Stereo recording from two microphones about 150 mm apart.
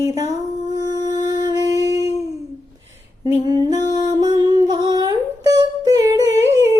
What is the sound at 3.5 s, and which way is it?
Music, 30° right (ahead or behind).